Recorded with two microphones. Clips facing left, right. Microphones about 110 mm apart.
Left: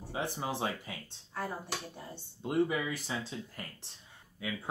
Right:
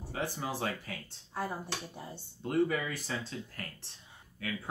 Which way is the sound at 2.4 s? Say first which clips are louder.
Even; 15° left (ahead or behind).